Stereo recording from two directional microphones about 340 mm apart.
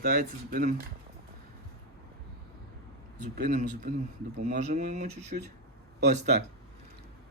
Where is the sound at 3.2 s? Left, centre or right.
Right.